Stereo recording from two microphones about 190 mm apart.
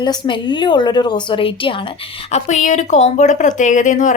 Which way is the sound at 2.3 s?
40° left (ahead or behind).